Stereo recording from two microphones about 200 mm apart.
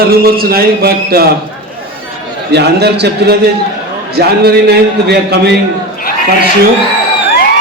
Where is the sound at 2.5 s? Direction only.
55° right (ahead or behind).